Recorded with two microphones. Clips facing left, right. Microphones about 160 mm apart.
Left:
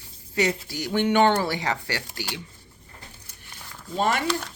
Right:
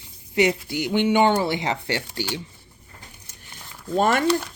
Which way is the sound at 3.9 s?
50° right (ahead or behind).